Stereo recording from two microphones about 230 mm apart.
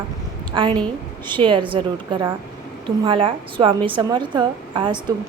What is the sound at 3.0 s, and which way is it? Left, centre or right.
A woman's voice, right.